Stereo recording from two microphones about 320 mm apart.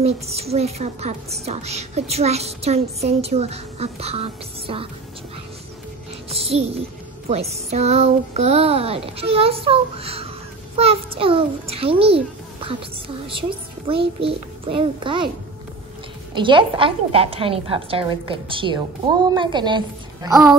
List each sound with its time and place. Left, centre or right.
0.0 s a woman's voice: centre
6.3 s a woman's voice: centre
16.3 s a woman's voice: centre